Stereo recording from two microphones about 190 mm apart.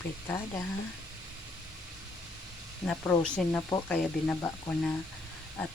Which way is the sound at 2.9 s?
5° left (ahead or behind).